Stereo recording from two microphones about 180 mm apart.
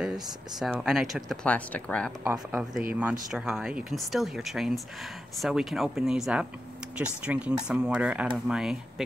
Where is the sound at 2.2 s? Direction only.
15° right (ahead or behind).